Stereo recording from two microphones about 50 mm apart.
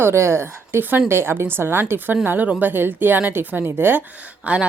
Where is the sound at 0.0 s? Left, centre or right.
Right.